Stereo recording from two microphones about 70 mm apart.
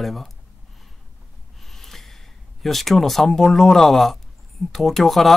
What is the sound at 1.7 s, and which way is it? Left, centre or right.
Snort, centre.